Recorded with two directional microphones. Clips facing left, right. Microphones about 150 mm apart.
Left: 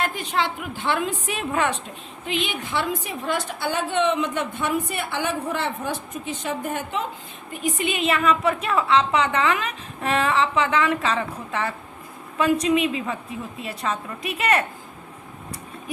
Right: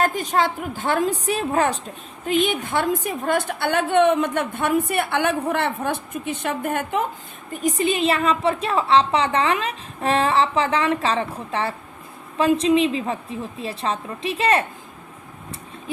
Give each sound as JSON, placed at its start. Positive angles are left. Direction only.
{"t": 0.0, "sound": "a woman's voice", "side_deg": -40}
{"t": 7.5, "sound": "a woman's voice", "side_deg": -40}